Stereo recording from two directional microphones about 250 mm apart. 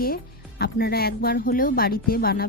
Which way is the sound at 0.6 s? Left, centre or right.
Left.